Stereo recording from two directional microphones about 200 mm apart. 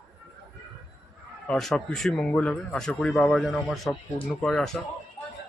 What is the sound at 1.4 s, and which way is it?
Speech, centre (ahead or behind).